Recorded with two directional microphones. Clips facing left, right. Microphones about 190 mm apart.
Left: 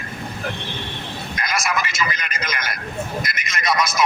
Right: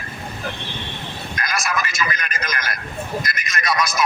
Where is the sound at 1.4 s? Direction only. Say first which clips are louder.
Left 1 dB; 20° left (ahead or behind).